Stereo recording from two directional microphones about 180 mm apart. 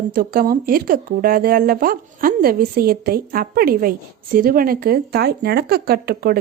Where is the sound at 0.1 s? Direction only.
55° right (ahead or behind).